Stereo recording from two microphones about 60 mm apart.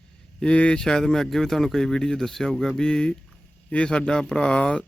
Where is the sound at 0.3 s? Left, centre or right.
Centre.